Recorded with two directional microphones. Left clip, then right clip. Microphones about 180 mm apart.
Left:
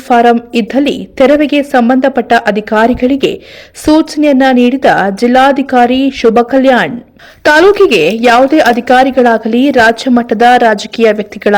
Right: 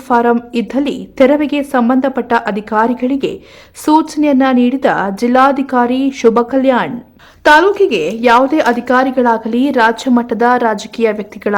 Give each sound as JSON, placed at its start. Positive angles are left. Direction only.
{"t": 0.1, "sound": "a woman's voice", "side_deg": 20}